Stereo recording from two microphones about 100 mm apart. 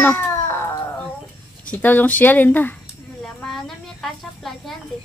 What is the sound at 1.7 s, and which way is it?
Speech, 15° left (ahead or behind).